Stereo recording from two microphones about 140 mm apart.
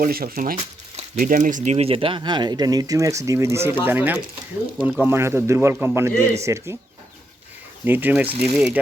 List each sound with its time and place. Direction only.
0.0 s speech: 90° right
0.5 s a sound: 50° right (ahead or behind)
1.2 s a man's voice: 70° right (ahead or behind); by 6.7 s 20° right (ahead or behind)
7.9 s a man's voice: 15° right (ahead or behind)